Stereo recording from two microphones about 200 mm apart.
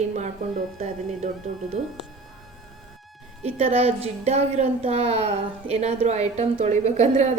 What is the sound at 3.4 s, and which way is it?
A child's voice, 30° right (ahead or behind).